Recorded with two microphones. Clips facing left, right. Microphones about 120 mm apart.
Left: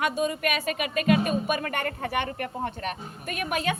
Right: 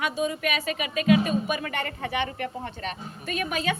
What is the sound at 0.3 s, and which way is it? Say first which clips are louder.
Speech: left 1 dB; 50° left (ahead or behind).